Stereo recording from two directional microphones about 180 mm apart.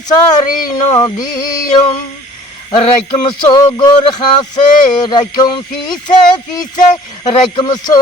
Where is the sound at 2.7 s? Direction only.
30° left (ahead or behind).